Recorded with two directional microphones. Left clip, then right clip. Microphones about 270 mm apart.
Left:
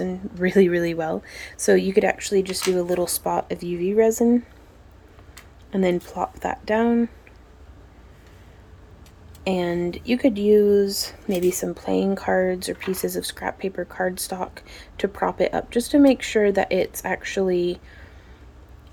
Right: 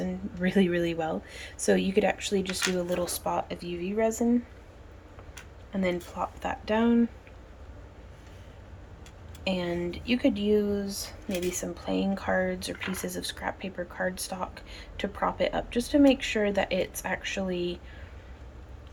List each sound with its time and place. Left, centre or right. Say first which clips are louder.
0.0 s speech: left 7 dB; centre
5.7 s speech: left 8 dB; left
9.4 s speech: left 7 dB; left